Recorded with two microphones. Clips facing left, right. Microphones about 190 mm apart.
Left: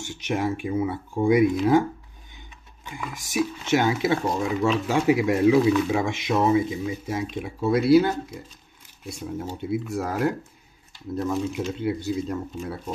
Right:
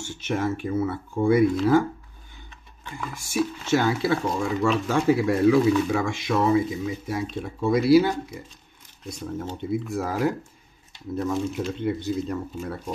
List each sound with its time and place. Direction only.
0.0 s speech: 15° left (ahead or behind); by 8.2 s centre (ahead or behind)
9.0 s speech: 10° left (ahead or behind)